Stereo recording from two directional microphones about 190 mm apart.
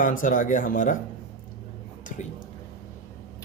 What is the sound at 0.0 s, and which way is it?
Speech, 45° left (ahead or behind).